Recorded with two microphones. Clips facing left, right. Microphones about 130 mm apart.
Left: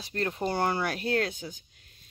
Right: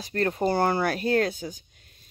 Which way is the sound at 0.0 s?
45° right (ahead or behind).